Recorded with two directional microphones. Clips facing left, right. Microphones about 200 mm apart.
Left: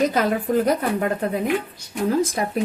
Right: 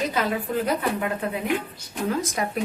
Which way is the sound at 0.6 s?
40° left (ahead or behind).